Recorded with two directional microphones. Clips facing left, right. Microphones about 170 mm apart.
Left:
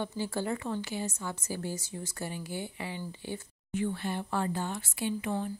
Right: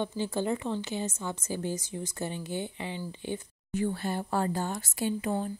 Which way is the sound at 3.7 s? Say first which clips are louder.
Right 2 dB; 40° right (ahead or behind).